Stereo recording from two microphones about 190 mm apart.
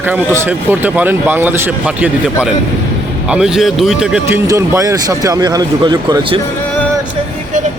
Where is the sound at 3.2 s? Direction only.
5° right (ahead or behind); by 6.4 s 25° right (ahead or behind).